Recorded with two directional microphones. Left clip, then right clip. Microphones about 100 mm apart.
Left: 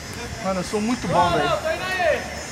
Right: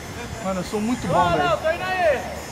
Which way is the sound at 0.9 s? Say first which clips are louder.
Even; 35° right (ahead or behind).